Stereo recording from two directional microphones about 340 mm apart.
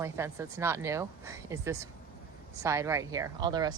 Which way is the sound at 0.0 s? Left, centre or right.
Centre.